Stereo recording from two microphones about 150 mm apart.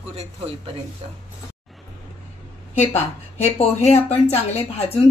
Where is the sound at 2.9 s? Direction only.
45° left (ahead or behind).